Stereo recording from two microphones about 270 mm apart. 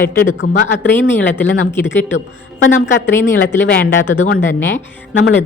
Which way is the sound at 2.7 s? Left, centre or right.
Left.